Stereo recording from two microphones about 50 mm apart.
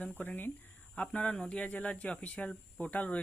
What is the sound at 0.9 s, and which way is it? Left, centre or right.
Speech, left.